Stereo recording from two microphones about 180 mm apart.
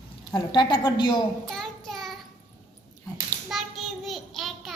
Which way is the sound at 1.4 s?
Centre (ahead or behind).